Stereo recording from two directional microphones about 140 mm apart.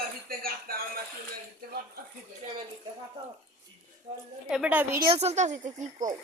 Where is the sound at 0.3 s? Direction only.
90° right.